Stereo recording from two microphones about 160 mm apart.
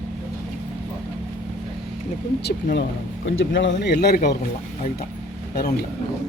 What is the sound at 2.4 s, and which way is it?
Speech, 90° left.